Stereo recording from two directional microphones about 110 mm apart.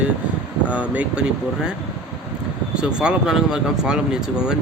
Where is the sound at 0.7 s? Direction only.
10° right (ahead or behind).